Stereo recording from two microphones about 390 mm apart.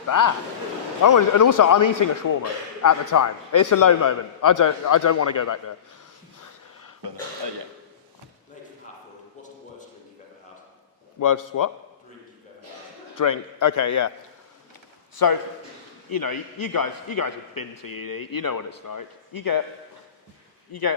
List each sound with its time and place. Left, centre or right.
1.0 s a man's voice: left
11.2 s a man's voice: left
13.1 s a man's voice: left
15.1 s a man's voice: left
20.7 s a man's voice: left